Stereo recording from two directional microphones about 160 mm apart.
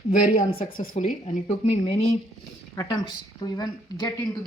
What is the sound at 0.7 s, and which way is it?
Speech, 60° left (ahead or behind).